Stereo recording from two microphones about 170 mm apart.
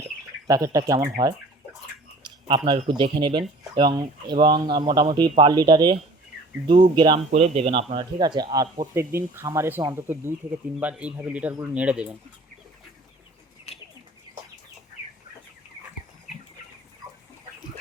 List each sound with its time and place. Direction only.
0.4 s speech: 20° right (ahead or behind)
2.2 s speech: 25° right (ahead or behind)
7.3 s a man's voice: 40° right (ahead or behind)
7.9 s speech: 25° right (ahead or behind); by 12.1 s 10° right (ahead or behind)